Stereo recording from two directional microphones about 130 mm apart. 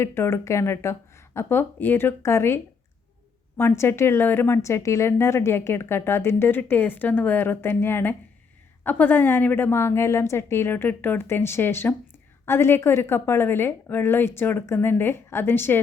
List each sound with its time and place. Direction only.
0.0 s speech: 20° left (ahead or behind)
3.6 s a woman's voice: 20° left (ahead or behind)